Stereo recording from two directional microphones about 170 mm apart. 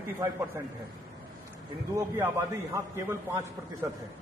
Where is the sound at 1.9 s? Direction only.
15° right (ahead or behind).